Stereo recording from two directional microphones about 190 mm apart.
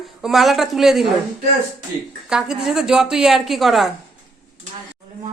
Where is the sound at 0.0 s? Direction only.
Centre (ahead or behind).